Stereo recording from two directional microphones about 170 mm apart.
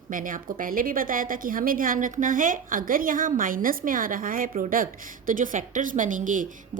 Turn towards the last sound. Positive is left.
turn(degrees=-50)  # may be behind; listen again after turning